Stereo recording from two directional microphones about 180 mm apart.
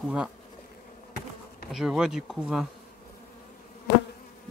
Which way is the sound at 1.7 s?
5° right (ahead or behind).